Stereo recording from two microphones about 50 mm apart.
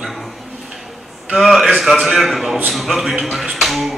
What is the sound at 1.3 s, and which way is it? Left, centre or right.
Speech, centre.